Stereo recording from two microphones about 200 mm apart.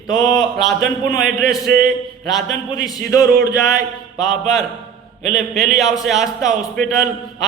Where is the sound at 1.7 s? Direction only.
45° right (ahead or behind).